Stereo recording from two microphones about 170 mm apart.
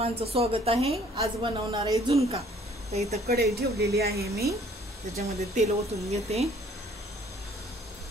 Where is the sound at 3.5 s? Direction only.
70° right (ahead or behind).